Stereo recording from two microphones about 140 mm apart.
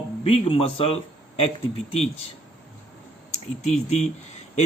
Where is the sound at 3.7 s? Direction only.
50° left (ahead or behind).